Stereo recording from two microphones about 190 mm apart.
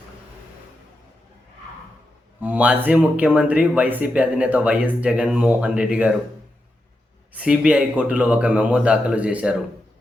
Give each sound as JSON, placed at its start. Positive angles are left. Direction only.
{"t": 2.4, "sound": "speech", "side_deg": -5}
{"t": 7.3, "sound": "speech", "side_deg": -5}